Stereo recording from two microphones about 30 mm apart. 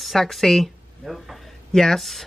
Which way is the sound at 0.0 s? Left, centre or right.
Centre.